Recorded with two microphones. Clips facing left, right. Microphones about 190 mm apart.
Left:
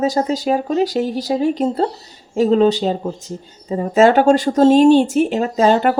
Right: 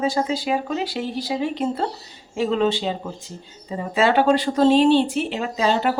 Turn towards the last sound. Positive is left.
turn(degrees=50)  # may be behind; listen again after turning